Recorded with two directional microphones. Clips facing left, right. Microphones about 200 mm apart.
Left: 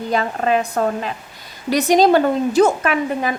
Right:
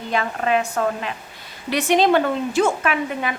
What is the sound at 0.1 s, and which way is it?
A woman's voice, 40° left (ahead or behind).